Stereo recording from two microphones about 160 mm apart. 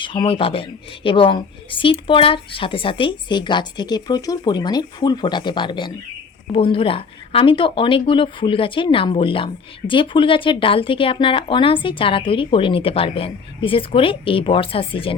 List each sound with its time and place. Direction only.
0.0 s a woman's voice: 30° left (ahead or behind)